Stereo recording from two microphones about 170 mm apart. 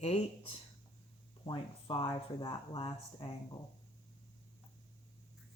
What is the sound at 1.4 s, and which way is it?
Speech, 30° left (ahead or behind).